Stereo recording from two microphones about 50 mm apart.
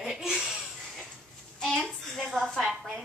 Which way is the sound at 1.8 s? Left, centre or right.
Centre.